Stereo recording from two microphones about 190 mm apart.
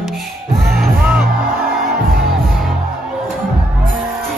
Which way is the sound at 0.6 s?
Centre (ahead or behind).